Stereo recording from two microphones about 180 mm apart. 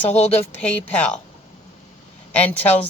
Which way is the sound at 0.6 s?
5° left (ahead or behind).